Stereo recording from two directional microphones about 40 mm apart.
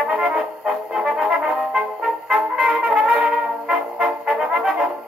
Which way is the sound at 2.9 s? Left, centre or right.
Centre.